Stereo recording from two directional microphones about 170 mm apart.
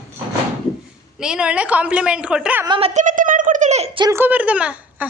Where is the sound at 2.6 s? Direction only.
30° right (ahead or behind).